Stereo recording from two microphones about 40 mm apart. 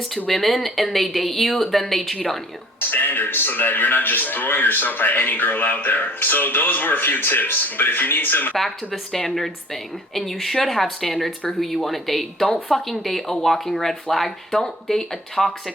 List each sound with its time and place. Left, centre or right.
0.3 s speech: centre
2.9 s a man's voice: left
8.5 s speech: centre